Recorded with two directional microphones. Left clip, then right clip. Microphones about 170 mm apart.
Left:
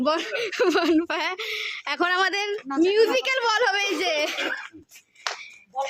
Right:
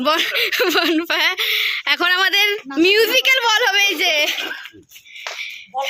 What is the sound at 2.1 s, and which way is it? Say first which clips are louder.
Speech: right 5 dB; 15° left (ahead or behind).